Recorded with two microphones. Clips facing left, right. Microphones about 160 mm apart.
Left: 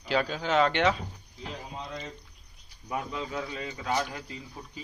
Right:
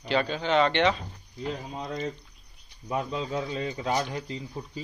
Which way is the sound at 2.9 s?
25° right (ahead or behind).